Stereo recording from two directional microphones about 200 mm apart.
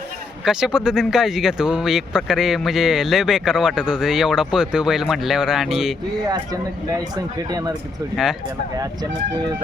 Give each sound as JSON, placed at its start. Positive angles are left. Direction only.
{"t": 0.4, "sound": "speech", "side_deg": -5}
{"t": 6.2, "sound": "speech", "side_deg": -20}
{"t": 8.1, "sound": "speech", "side_deg": 0}